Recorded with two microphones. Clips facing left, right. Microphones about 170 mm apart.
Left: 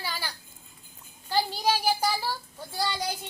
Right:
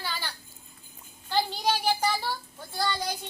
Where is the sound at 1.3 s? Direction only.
10° left (ahead or behind).